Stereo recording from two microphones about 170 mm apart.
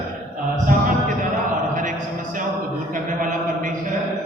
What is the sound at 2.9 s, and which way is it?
Speech, 50° right (ahead or behind).